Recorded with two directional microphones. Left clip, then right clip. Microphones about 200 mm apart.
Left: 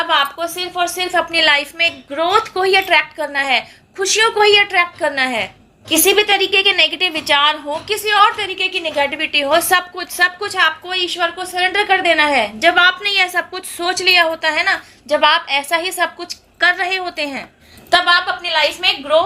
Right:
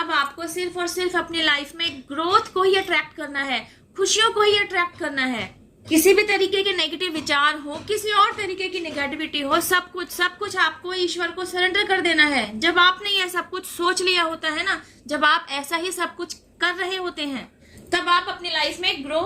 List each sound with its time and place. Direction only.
0.1 s a sound: 10° right (ahead or behind)
0.5 s a woman's voice: 10° right (ahead or behind)
6.1 s a woman's voice: 45° left (ahead or behind)
6.6 s a woman's voice: 20° right (ahead or behind); by 19.2 s centre (ahead or behind)